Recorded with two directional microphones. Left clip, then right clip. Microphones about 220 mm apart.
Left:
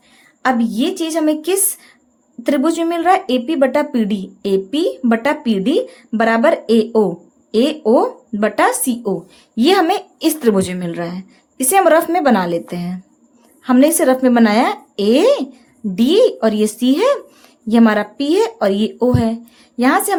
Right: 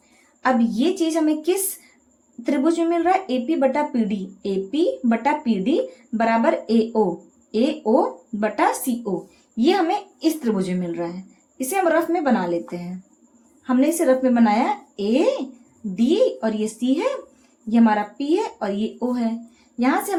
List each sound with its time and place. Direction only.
0.4 s a woman's voice: 35° left (ahead or behind)